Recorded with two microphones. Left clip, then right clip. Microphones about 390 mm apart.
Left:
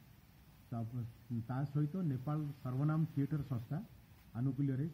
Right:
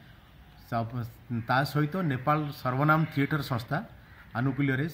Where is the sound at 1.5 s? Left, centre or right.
Centre.